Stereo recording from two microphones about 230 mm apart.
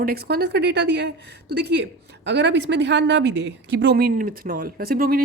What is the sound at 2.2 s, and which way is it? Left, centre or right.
A woman's voice, right.